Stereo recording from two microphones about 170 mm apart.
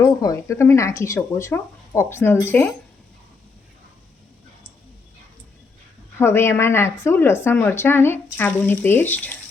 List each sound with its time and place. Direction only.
0.0 s speech: 20° left (ahead or behind)
6.1 s speech: 15° left (ahead or behind)